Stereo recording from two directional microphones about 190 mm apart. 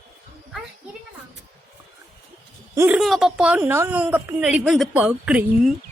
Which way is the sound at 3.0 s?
Centre (ahead or behind).